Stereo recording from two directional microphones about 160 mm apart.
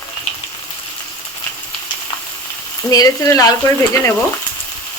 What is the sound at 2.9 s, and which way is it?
Speech, 20° left (ahead or behind).